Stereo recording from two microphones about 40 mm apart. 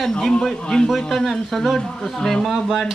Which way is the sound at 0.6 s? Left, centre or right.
Centre.